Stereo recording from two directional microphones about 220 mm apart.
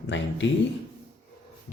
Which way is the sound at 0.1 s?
55° left (ahead or behind).